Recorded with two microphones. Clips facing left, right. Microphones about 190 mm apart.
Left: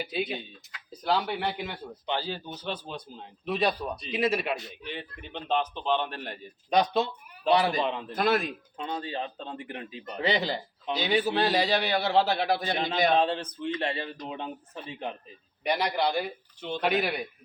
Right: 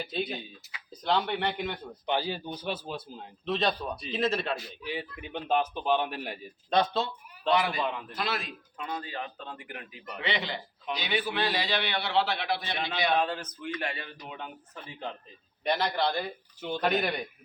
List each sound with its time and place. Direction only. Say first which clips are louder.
0.0 s speech: left 2 dB; 5° left (ahead or behind)
2.0 s speech: right 2 dB; 15° right (ahead or behind)
3.4 s a man's voice: left 1 dB; 10° left (ahead or behind)
5.2 s speech: even; 10° right (ahead or behind)
6.7 s speech: left 2 dB; 15° left (ahead or behind)
7.5 s a man's voice: left 3 dB; 35° left (ahead or behind)
7.8 s a man's voice: left 3 dB; 25° left (ahead or behind)
8.1 s a man's voice: left 8 dB; 50° left (ahead or behind)
8.8 s a man's voice: left 3 dB; 30° left (ahead or behind)
13.1 s a man's voice: left 4 dB; 30° left (ahead or behind)
14.8 s a man's voice: left 1 dB; 15° left (ahead or behind)
16.6 s speech: even; 10° right (ahead or behind)
16.8 s a man's voice: left 1 dB; 5° left (ahead or behind)